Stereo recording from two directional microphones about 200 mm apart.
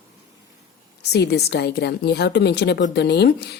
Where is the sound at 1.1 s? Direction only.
55° left (ahead or behind).